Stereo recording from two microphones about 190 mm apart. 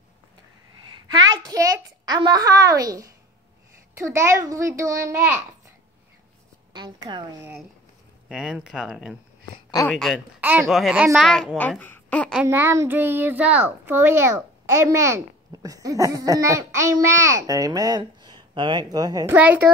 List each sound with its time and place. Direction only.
0.8 s a sound: 20° right (ahead or behind)
4.0 s a child's voice: 15° right (ahead or behind)
6.7 s a woman's voice: 25° right (ahead or behind)
8.3 s a child's voice: 5° right (ahead or behind)
12.4 s a child's voice: 10° right (ahead or behind)